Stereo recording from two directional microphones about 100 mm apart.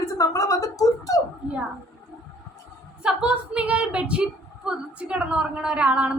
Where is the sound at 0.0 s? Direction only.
35° left (ahead or behind).